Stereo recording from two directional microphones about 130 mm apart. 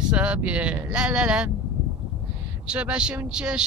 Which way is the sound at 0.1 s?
10° right (ahead or behind).